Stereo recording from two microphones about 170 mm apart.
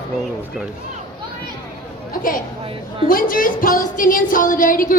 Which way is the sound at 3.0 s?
55° left (ahead or behind).